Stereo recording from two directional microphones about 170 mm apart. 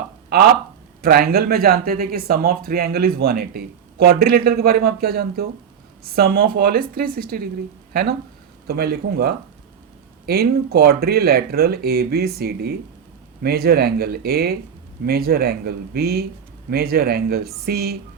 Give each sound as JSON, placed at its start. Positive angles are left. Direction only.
{"t": 1.0, "sound": "speech", "side_deg": -65}
{"t": 8.6, "sound": "speech", "side_deg": -65}